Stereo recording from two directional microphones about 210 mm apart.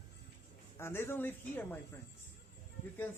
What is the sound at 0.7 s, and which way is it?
Speech, 10° left (ahead or behind).